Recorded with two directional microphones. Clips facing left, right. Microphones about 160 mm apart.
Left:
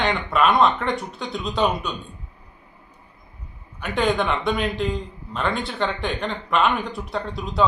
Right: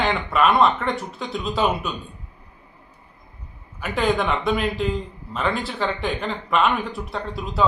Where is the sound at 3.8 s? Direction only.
Centre (ahead or behind).